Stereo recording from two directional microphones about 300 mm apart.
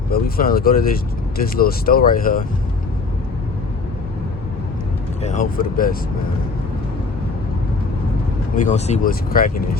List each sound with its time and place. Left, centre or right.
0.1 s speech: left
5.2 s speech: left
8.5 s speech: left